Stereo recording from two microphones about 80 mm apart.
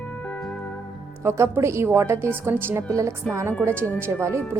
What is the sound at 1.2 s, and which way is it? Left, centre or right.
A woman's voice, right.